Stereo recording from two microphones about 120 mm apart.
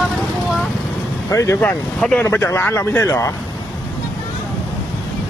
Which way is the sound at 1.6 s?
15° left (ahead or behind).